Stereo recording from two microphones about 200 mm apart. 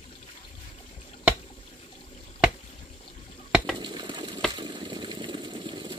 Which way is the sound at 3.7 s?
20° right (ahead or behind).